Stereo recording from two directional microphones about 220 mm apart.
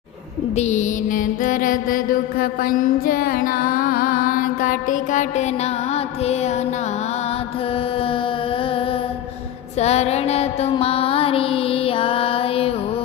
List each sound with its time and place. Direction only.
0.5 s music: 30° left (ahead or behind)
9.7 s mantra: 30° left (ahead or behind)